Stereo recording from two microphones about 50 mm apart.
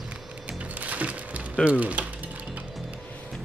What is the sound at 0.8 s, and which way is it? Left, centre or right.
Music, right.